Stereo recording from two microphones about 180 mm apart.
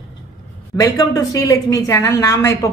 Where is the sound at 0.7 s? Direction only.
20° left (ahead or behind).